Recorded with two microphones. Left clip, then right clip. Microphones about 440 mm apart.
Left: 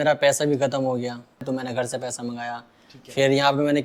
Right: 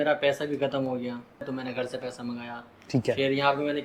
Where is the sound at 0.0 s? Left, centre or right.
Left.